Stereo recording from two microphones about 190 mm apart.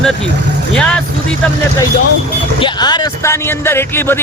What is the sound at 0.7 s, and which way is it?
Speech, 5° left (ahead or behind).